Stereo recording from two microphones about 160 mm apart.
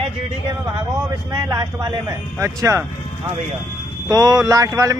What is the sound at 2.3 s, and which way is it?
Speech, 20° right (ahead or behind).